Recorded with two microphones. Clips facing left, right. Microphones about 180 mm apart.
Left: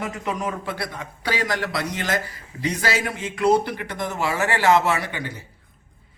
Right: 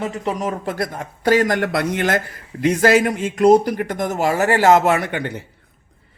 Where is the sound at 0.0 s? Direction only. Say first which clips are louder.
Right 4 dB; 30° right (ahead or behind).